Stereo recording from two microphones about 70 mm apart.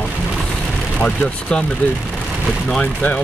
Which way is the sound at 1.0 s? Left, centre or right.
Centre.